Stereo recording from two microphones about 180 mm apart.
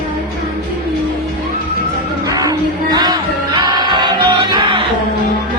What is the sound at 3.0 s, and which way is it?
Music, 20° right (ahead or behind).